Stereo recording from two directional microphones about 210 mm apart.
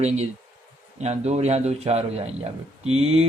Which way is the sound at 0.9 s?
30° right (ahead or behind).